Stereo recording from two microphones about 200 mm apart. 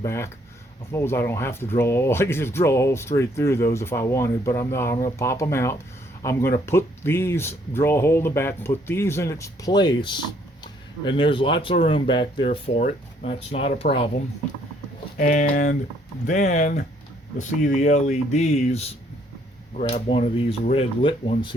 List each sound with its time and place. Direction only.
0.0 s speech: 15° left (ahead or behind); by 13.8 s 30° left (ahead or behind)
15.2 s speech: 40° left (ahead or behind); by 21.5 s 25° left (ahead or behind)